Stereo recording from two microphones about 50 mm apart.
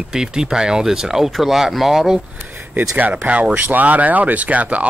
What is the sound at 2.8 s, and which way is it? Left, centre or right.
Speech, right.